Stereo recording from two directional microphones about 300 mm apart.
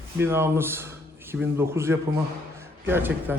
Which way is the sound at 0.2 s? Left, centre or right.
Centre.